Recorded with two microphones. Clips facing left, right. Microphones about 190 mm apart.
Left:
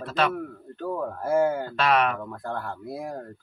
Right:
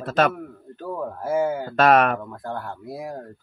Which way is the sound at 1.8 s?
50° right (ahead or behind).